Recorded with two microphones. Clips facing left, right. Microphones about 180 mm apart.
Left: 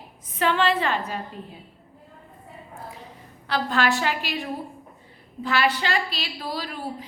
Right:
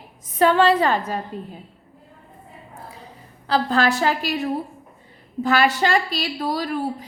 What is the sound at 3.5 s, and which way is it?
A woman's voice, 35° right (ahead or behind).